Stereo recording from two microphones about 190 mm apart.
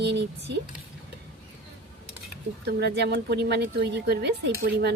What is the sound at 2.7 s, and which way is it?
A woman's voice, 65° right (ahead or behind).